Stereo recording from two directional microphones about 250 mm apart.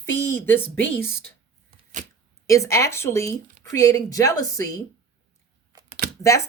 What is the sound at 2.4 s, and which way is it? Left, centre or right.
Speech, centre.